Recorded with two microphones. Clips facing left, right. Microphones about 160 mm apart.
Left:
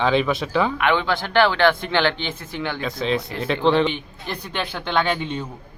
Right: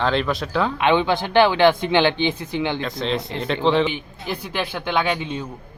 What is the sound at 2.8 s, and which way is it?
Speech, centre (ahead or behind).